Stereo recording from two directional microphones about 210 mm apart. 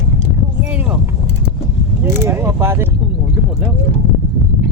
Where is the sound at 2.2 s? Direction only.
10° right (ahead or behind).